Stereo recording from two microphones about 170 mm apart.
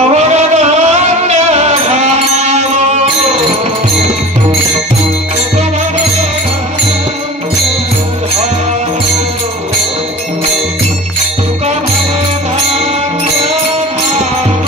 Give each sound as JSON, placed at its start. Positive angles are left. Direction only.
{"t": 0.1, "sound": "music", "side_deg": -40}